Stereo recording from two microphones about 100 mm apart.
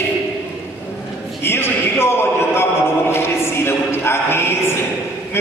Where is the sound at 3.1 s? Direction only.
25° left (ahead or behind).